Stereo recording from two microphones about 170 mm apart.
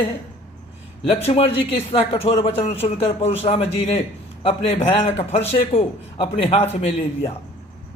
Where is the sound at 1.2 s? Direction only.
35° left (ahead or behind).